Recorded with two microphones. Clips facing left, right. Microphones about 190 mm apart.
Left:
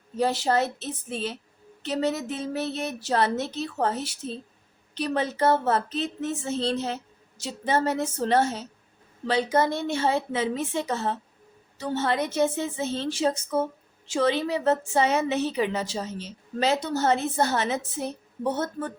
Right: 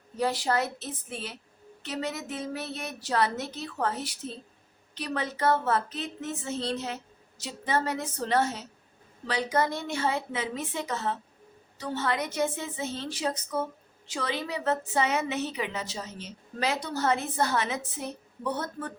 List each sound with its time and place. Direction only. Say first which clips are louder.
0.2 s a woman's voice: left 4 dB; 25° left (ahead or behind)